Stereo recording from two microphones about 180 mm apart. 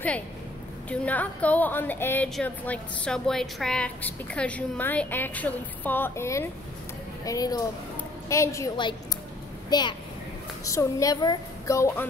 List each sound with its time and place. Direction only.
0.8 s a woman's voice: 10° left (ahead or behind)